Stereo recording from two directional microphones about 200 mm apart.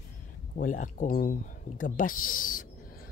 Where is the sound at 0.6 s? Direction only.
40° left (ahead or behind).